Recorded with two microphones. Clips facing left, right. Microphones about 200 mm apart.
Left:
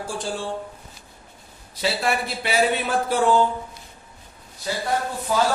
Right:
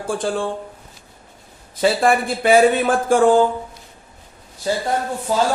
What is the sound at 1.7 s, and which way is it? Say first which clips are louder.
Speech: right 7 dB; 50° right (ahead or behind).